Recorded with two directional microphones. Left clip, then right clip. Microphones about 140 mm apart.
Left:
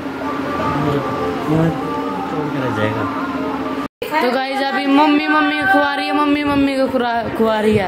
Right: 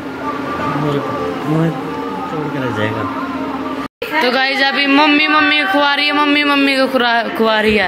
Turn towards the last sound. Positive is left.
turn(degrees=10)  # may be behind; listen again after turning